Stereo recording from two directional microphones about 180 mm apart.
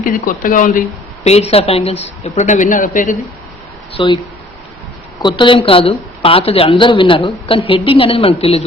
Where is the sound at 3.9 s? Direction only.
25° left (ahead or behind).